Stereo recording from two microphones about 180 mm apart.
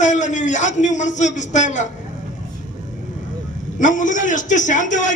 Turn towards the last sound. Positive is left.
turn(degrees=45)  # may be behind; listen again after turning